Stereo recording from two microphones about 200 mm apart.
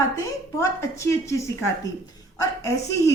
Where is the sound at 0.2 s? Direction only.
15° left (ahead or behind).